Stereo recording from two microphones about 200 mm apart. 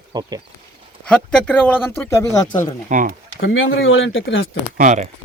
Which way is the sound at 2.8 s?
40° right (ahead or behind).